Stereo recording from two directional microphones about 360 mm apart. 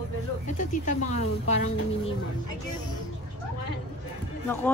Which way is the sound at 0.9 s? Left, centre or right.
Centre.